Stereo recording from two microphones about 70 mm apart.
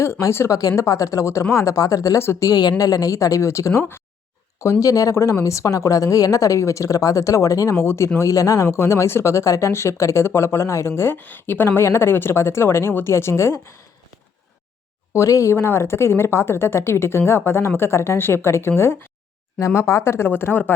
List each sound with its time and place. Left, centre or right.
0.0 s a woman's voice: left
2.5 s a woman's voice: left
3.8 s speech: left
4.6 s a woman's voice: left
7.8 s speech: left
15.1 s speech: left
15.5 s speech: left
19.5 s speech: left